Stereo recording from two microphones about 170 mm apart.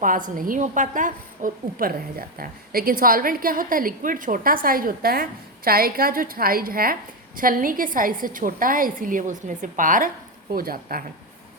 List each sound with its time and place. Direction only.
0.3 s a woman's voice: 55° right (ahead or behind)